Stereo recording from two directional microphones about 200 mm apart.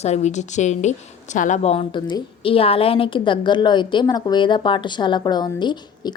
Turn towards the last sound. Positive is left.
turn(degrees=20)  # may be behind; listen again after turning